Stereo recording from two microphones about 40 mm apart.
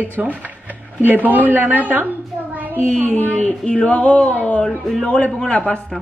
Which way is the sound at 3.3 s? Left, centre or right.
Left.